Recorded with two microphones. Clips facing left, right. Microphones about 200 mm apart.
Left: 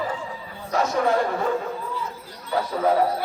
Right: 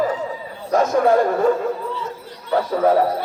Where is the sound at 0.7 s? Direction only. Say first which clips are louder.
Right 6 dB; 50° right (ahead or behind).